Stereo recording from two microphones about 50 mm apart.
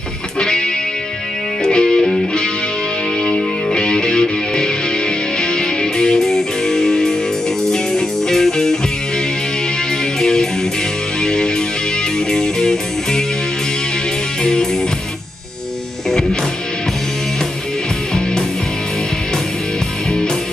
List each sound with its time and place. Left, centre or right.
0.4 s music: centre
3.3 s music: centre
10.2 s music: centre
14.4 s music: centre